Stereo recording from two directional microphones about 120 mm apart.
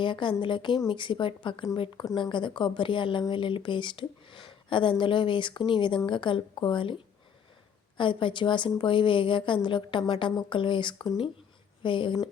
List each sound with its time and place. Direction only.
0.0 s speech: 40° left (ahead or behind)